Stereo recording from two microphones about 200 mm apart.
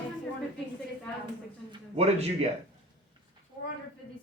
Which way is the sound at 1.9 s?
30° right (ahead or behind).